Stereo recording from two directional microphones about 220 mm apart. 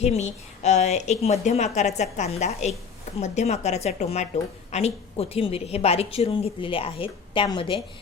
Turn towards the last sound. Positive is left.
turn(degrees=20)  # may be behind; listen again after turning